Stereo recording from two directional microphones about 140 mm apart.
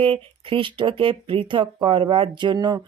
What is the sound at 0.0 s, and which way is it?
Speech, 40° right (ahead or behind).